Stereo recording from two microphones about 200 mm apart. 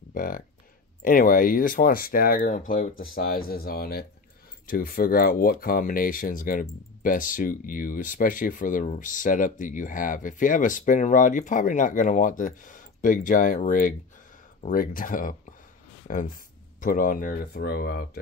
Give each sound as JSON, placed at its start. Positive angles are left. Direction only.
{"t": 0.1, "sound": "speech", "side_deg": 45}